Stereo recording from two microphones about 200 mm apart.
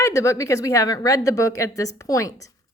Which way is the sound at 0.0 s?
15° left (ahead or behind).